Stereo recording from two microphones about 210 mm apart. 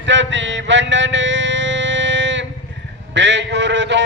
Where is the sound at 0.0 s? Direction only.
60° right (ahead or behind).